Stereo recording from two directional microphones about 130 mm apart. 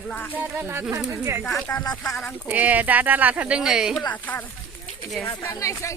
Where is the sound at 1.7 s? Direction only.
25° left (ahead or behind).